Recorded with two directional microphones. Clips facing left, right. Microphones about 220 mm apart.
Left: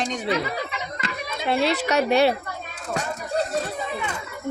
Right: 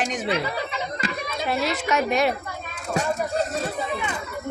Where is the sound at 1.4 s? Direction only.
30° left (ahead or behind).